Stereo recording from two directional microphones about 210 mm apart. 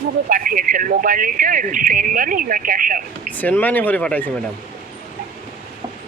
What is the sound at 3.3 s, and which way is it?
Speech, 10° left (ahead or behind).